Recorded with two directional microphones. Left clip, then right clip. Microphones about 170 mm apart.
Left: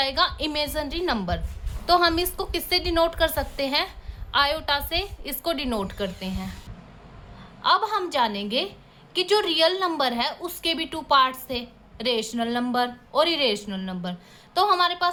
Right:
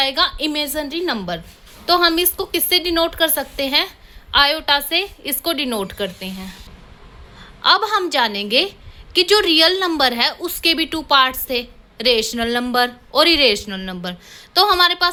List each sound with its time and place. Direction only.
0.0 s a woman's voice: 25° right (ahead or behind)
7.6 s a woman's voice: 20° right (ahead or behind)